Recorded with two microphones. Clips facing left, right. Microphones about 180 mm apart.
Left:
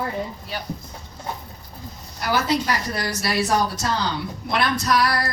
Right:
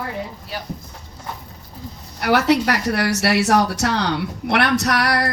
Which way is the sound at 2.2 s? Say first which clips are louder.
Right 5 dB; 70° right (ahead or behind).